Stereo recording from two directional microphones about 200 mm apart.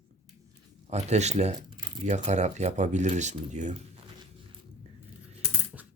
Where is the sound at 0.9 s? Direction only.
35° right (ahead or behind).